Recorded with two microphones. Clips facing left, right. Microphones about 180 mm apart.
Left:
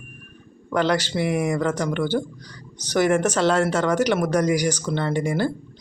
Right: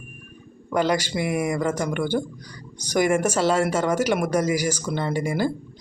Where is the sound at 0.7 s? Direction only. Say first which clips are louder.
Left 1 dB; 10° right (ahead or behind).